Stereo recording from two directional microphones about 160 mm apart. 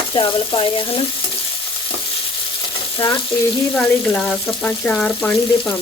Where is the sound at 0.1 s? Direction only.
30° left (ahead or behind).